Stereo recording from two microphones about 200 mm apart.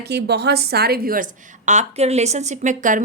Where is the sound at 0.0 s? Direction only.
55° right (ahead or behind).